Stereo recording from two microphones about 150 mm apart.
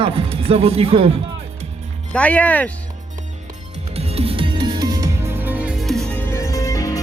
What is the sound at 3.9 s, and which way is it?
Music, 45° right (ahead or behind).